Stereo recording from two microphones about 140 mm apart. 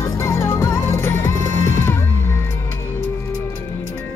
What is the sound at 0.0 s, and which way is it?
Music, 20° left (ahead or behind).